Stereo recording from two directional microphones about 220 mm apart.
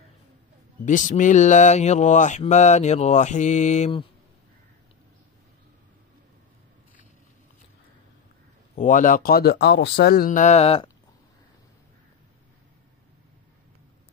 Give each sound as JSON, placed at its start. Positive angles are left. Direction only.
{"t": 0.8, "sound": "mantra", "side_deg": 35}
{"t": 8.7, "sound": "mantra", "side_deg": 35}